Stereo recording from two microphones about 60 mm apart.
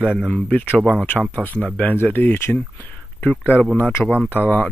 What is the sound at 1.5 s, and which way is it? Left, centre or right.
Speech, centre.